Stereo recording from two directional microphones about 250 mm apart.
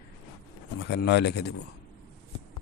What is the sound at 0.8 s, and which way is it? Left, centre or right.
Speech, left.